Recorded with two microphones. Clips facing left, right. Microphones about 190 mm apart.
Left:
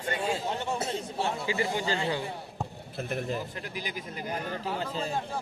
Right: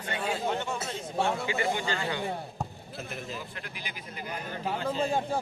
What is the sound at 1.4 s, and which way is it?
Speech, 35° left (ahead or behind).